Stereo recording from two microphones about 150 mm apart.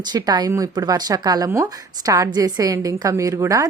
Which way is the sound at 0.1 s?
25° right (ahead or behind).